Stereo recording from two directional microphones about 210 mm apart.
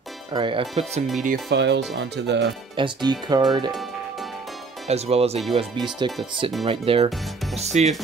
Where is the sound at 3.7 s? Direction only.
Centre (ahead or behind).